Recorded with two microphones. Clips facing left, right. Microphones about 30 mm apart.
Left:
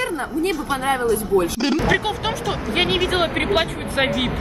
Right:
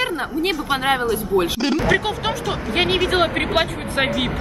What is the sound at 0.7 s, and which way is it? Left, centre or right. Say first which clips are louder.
Speech: right 3 dB; right.